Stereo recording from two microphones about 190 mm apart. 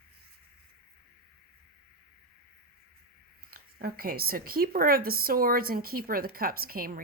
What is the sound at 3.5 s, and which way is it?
A woman's voice, 50° right (ahead or behind).